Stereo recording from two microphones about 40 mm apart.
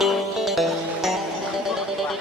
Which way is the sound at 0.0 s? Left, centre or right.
Centre.